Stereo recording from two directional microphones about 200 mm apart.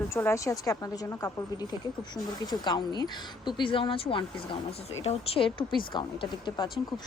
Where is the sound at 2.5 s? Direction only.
20° left (ahead or behind).